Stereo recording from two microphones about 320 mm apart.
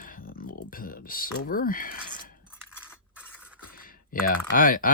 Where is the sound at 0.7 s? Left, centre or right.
Left.